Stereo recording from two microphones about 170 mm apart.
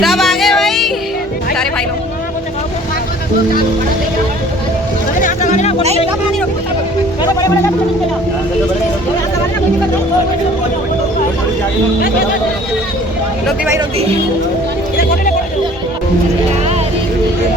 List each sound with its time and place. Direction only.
0.0 s music: centre (ahead or behind)
5.2 s music: 45° left (ahead or behind)